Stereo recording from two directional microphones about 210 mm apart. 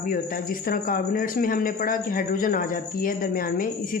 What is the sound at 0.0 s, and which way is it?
A woman's voice, 40° left (ahead or behind).